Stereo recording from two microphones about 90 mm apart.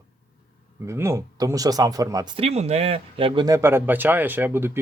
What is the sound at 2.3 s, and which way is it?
Speech, 90° right.